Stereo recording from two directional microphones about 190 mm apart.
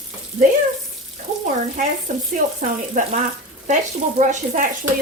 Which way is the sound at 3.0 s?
45° right (ahead or behind).